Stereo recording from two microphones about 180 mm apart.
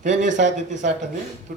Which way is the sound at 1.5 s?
55° right (ahead or behind).